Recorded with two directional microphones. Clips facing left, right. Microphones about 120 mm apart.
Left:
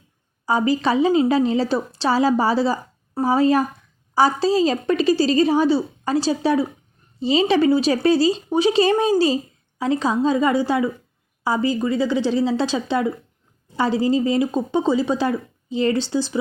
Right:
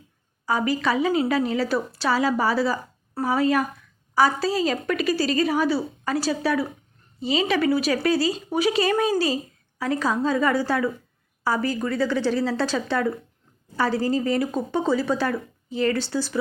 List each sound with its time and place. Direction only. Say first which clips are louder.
0.4 s a woman's voice: left 4 dB; 25° left (ahead or behind)